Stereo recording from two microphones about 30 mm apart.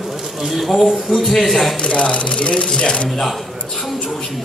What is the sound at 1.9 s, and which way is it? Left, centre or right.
Speech, left.